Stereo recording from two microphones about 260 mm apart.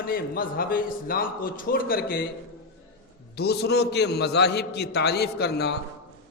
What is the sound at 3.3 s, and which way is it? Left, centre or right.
A man's voice, left.